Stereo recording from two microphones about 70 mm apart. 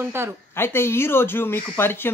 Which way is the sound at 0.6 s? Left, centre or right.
Left.